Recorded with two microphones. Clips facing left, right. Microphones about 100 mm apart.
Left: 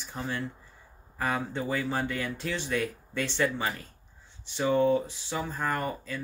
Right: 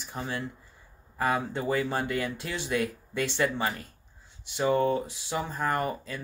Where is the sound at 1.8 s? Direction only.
15° right (ahead or behind).